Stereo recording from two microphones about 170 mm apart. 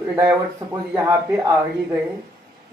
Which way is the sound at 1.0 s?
15° right (ahead or behind).